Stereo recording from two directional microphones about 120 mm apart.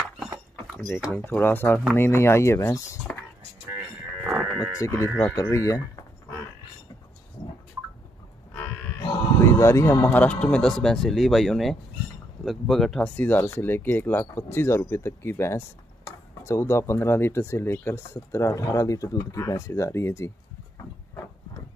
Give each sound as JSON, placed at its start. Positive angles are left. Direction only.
{"t": 1.1, "sound": "speech", "side_deg": 15}
{"t": 4.2, "sound": "livestock", "side_deg": -5}
{"t": 4.7, "sound": "speech", "side_deg": 25}
{"t": 9.4, "sound": "speech", "side_deg": 20}
{"t": 13.0, "sound": "speech", "side_deg": 15}